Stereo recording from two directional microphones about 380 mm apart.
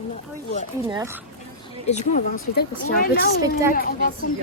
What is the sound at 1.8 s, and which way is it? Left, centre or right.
Speech, centre.